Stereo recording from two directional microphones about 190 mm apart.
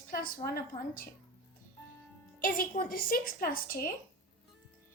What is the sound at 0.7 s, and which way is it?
Speech, 30° left (ahead or behind).